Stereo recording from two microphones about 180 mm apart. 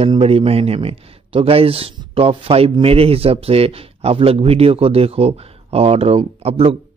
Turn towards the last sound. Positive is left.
turn(degrees=-35)  # may be behind; listen again after turning